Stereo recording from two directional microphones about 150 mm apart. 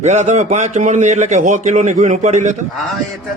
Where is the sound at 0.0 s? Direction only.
50° right (ahead or behind).